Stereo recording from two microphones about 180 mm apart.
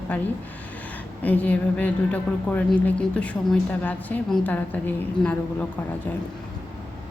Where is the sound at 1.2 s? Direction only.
10° left (ahead or behind).